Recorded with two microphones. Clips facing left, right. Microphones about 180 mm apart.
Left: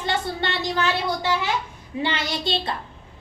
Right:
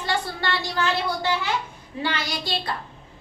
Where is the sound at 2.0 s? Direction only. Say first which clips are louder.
Left 2 dB; 20° left (ahead or behind).